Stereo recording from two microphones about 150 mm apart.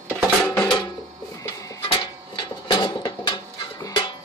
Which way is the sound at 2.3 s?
30° left (ahead or behind).